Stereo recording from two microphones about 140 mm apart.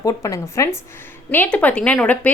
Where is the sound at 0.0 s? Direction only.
25° left (ahead or behind).